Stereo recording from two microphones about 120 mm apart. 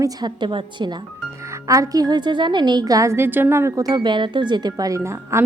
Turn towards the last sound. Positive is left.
turn(degrees=-20)  # may be behind; listen again after turning